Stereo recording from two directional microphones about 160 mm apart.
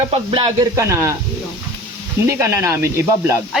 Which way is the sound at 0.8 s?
20° right (ahead or behind).